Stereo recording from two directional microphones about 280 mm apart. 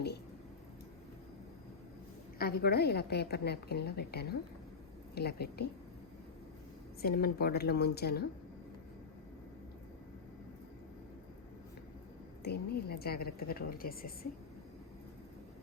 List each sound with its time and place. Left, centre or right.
2.4 s a woman's voice: left
7.0 s a woman's voice: left
12.4 s a woman's voice: left